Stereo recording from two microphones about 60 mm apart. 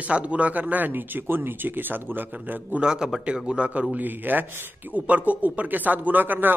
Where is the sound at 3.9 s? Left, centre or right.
Right.